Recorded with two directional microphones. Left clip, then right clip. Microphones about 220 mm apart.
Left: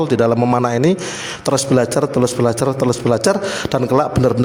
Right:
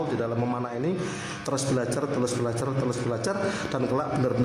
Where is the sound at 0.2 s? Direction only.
45° left (ahead or behind).